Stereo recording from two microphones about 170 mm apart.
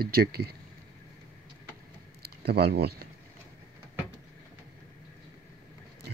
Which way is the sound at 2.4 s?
70° right (ahead or behind).